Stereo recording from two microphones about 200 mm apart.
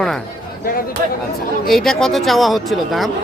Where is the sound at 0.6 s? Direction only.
50° left (ahead or behind).